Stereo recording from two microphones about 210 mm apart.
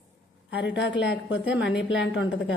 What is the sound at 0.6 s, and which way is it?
A woman's voice, 55° left (ahead or behind).